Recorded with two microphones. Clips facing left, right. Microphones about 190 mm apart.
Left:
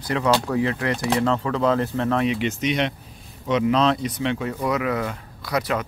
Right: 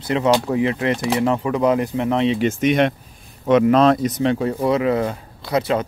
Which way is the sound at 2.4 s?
50° right (ahead or behind).